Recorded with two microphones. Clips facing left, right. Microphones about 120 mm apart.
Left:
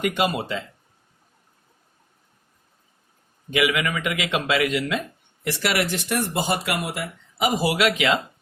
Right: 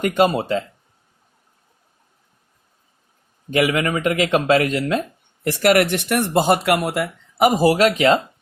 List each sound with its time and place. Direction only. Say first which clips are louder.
0.0 s speech: right 6 dB; 35° right (ahead or behind)
3.5 s a man's voice: right 4 dB; 40° right (ahead or behind)